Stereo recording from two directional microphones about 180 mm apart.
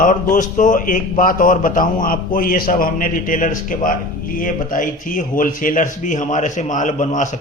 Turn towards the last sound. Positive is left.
turn(degrees=45)  # may be behind; listen again after turning